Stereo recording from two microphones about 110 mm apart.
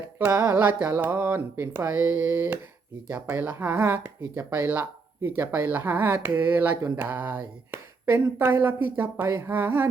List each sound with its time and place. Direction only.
0.3 s speech: 25° right (ahead or behind)